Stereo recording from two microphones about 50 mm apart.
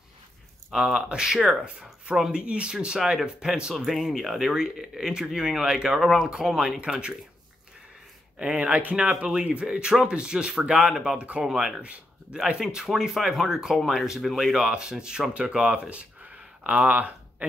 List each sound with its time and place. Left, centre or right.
0.7 s speech: centre
3.7 s speech: centre
6.9 s speech: centre
8.4 s speech: right
11.1 s speech: right
11.8 s speech: right
12.5 s speech: centre; by 17.5 s right